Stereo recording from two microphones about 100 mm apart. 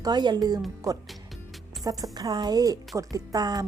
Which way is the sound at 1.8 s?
40° right (ahead or behind).